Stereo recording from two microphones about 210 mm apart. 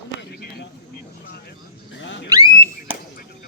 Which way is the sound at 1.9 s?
60° left (ahead or behind).